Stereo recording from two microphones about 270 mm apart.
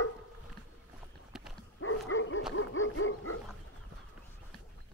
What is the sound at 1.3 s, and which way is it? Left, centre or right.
Dog, centre.